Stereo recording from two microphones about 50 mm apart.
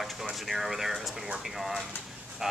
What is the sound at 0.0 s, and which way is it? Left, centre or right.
Speech, centre.